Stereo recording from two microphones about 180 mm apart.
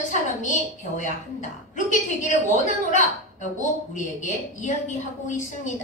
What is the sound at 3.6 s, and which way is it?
A woman's voice, 45° left (ahead or behind).